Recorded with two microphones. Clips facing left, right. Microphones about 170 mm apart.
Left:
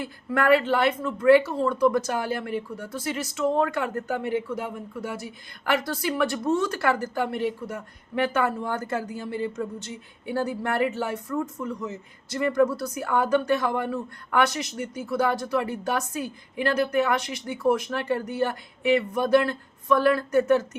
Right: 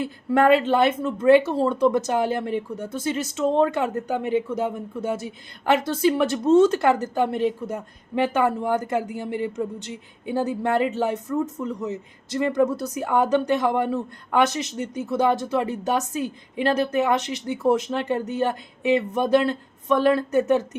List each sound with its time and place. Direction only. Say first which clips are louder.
0.0 s a woman's voice: right 5 dB; 25° right (ahead or behind)